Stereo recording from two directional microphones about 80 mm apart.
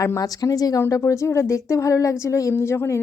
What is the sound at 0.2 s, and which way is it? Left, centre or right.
Speech, left.